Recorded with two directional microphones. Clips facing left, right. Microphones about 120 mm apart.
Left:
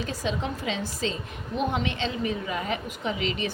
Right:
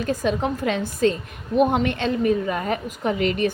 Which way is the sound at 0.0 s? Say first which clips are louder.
Right 7 dB; 50° right (ahead or behind).